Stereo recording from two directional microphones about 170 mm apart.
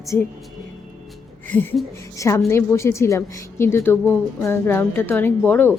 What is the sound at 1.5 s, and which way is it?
A woman's voice, 10° left (ahead or behind).